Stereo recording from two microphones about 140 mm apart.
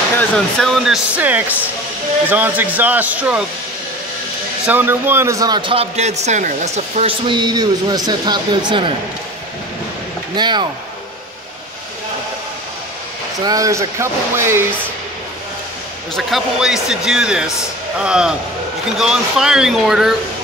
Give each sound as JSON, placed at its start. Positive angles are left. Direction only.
{"t": 0.2, "sound": "speech", "side_deg": 5}
{"t": 4.6, "sound": "a man's voice", "side_deg": -15}
{"t": 7.2, "sound": "a man's voice", "side_deg": -30}
{"t": 10.3, "sound": "a man's voice", "side_deg": -30}
{"t": 13.4, "sound": "speech", "side_deg": -25}
{"t": 16.2, "sound": "speech", "side_deg": 0}